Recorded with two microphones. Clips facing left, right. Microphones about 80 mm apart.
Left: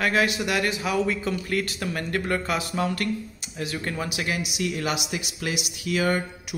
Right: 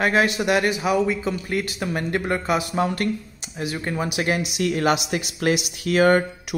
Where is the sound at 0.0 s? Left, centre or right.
Right.